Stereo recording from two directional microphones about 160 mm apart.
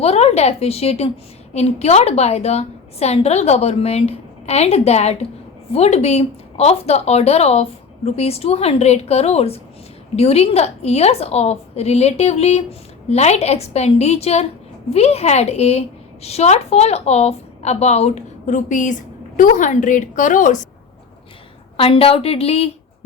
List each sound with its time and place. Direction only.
0.0 s a woman's voice: 40° left (ahead or behind)
21.8 s speech: 35° left (ahead or behind)